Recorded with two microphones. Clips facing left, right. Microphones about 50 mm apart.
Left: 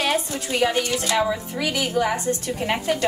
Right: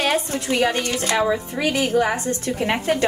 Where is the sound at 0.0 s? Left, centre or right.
Right.